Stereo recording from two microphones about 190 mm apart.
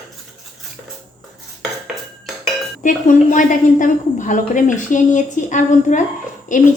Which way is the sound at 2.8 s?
45° left (ahead or behind).